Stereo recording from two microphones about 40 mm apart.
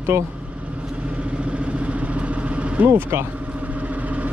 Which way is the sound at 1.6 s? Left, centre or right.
Right.